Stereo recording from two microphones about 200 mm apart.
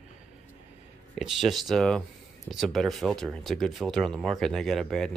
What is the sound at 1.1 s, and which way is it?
Speech, centre (ahead or behind).